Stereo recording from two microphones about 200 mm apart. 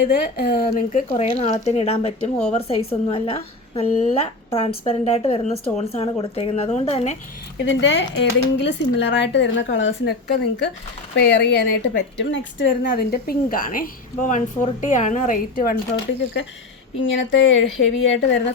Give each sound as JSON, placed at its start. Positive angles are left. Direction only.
{"t": 0.0, "sound": "a woman's voice", "side_deg": 50}
{"t": 7.6, "sound": "a woman's voice", "side_deg": 65}
{"t": 17.0, "sound": "speech", "side_deg": 70}